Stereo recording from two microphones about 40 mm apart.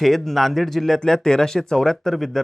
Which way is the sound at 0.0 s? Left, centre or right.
Centre.